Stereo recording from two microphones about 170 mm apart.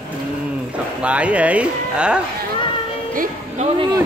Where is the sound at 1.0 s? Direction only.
5° right (ahead or behind).